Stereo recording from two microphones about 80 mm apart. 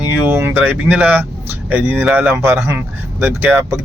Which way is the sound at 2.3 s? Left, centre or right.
Right.